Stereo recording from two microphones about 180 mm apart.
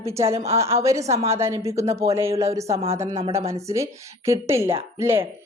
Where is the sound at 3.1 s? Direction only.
35° right (ahead or behind).